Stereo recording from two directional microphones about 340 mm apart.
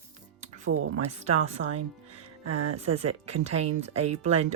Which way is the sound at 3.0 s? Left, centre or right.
Right.